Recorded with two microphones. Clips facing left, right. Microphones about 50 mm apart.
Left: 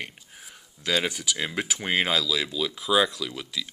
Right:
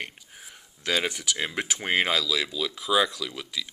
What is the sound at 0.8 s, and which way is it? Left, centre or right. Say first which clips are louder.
Speech: left 1 dB; right.